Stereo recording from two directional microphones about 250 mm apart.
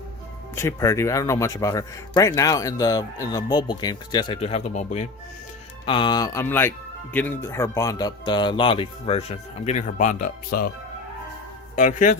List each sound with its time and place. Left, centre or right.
0.5 s speech: centre; by 10.7 s left
11.8 s a man's voice: left